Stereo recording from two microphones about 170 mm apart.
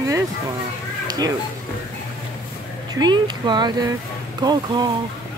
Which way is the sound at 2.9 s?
25° right (ahead or behind).